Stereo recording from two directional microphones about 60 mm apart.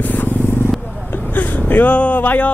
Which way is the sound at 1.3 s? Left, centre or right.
Left.